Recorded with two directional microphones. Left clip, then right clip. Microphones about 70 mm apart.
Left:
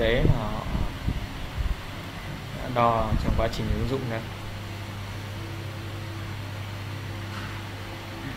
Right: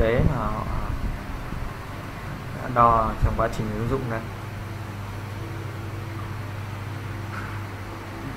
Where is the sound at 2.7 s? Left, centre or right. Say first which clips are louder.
Right 5 dB; left.